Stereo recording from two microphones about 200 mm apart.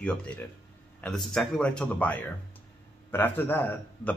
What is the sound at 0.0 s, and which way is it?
A man's voice, 5° left (ahead or behind).